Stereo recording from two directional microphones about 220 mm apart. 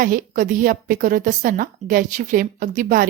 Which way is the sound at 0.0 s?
40° right (ahead or behind).